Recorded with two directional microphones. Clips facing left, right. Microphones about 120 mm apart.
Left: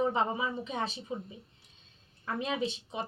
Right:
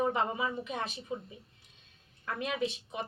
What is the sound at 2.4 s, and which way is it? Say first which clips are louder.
Speech: right 1 dB; 30° left (ahead or behind).